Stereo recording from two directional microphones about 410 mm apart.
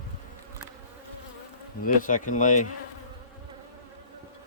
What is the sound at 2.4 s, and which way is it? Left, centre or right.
Insect, centre.